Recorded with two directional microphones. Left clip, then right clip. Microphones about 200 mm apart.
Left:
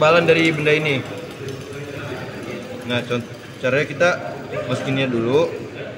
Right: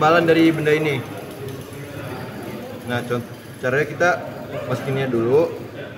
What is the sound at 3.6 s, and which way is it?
Speech, 15° right (ahead or behind).